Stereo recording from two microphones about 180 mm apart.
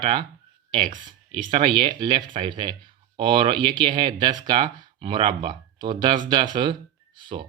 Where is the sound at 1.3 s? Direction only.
25° right (ahead or behind).